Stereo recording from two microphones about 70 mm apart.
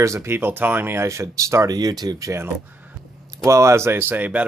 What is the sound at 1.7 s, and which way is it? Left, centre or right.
Speech, right.